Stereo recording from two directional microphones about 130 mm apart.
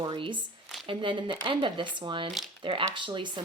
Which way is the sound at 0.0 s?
35° right (ahead or behind).